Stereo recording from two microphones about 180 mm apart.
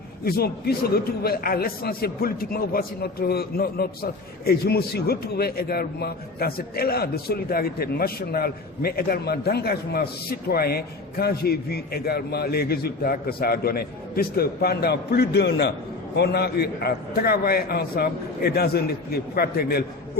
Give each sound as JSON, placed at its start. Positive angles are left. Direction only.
{"t": 0.3, "sound": "a man's voice", "side_deg": 60}